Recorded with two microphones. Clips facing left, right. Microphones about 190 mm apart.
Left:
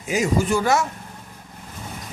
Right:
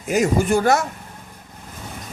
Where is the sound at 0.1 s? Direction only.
55° right (ahead or behind).